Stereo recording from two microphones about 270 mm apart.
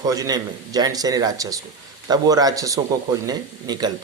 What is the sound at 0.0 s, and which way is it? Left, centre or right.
Speech, centre.